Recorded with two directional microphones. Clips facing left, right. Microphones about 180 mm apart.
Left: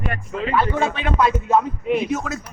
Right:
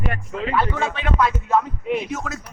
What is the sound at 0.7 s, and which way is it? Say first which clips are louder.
Speech: left 2 dB; 20° left (ahead or behind).